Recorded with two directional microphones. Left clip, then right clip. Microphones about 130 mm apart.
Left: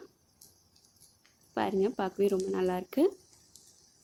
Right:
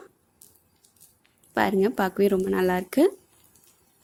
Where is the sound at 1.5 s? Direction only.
50° right (ahead or behind).